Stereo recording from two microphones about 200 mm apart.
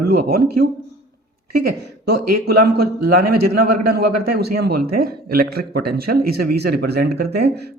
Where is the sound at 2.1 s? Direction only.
50° right (ahead or behind).